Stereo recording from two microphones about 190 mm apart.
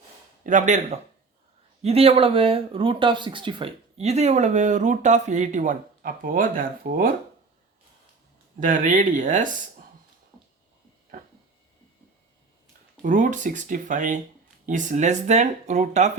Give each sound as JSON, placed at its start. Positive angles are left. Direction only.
{"t": 0.4, "sound": "speech", "side_deg": -40}
{"t": 8.6, "sound": "speech", "side_deg": -45}
{"t": 13.0, "sound": "speech", "side_deg": -45}